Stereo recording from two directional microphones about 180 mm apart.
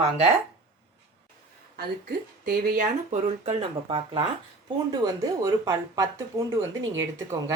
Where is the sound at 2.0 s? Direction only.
55° right (ahead or behind); by 6.1 s 20° right (ahead or behind).